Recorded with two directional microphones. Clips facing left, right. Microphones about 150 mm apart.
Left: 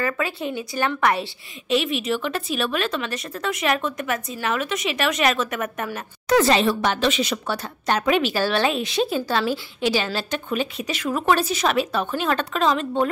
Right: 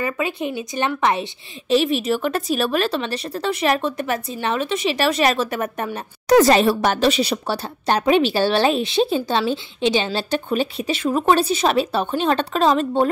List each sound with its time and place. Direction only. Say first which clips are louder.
0.0 s a woman's voice: right 2 dB; 20° right (ahead or behind)
1.7 s a woman's voice: right 4 dB; 35° right (ahead or behind)